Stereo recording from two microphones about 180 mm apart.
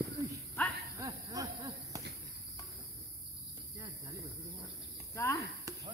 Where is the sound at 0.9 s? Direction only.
20° right (ahead or behind).